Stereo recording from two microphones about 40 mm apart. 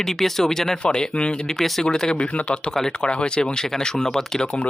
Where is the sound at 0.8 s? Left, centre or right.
Left.